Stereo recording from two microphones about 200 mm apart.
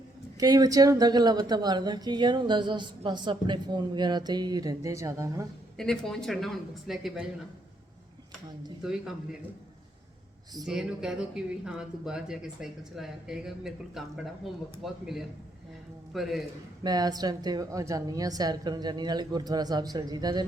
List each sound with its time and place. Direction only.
0.3 s a woman's voice: 20° right (ahead or behind)
5.7 s speech: centre (ahead or behind)
8.8 s speech: centre (ahead or behind)
10.7 s speech: 5° right (ahead or behind)
16.8 s a woman's voice: 20° right (ahead or behind)